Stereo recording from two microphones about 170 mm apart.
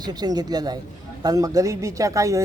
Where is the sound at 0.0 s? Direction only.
25° right (ahead or behind).